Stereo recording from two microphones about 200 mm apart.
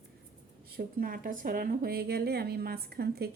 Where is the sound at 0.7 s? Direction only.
50° right (ahead or behind).